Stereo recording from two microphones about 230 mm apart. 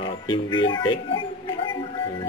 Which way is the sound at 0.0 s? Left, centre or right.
Centre.